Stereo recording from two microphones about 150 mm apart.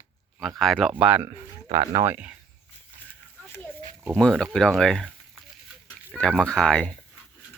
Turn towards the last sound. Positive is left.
turn(degrees=5)  # may be behind; listen again after turning